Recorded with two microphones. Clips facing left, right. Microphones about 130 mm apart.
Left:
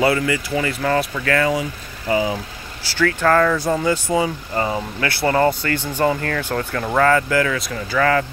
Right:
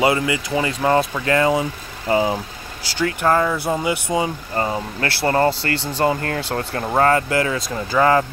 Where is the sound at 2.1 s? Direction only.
40° right (ahead or behind).